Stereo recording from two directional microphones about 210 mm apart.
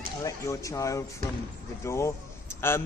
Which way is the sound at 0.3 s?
15° left (ahead or behind).